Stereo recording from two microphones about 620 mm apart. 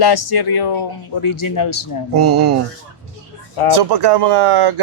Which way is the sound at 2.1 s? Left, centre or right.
Right.